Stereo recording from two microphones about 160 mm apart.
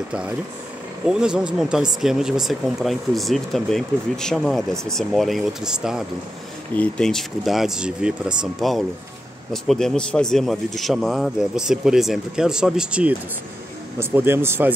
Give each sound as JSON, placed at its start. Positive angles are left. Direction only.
{"t": 1.0, "sound": "speech", "side_deg": -5}